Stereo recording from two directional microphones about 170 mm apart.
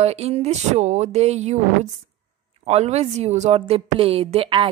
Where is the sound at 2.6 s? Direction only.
40° right (ahead or behind).